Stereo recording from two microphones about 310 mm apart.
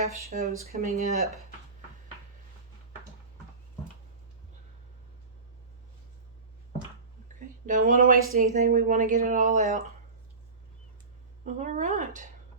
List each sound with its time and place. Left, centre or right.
0.0 s speech: right
7.3 s speech: right
11.4 s speech: right